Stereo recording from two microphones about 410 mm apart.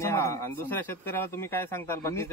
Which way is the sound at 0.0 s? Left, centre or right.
Centre.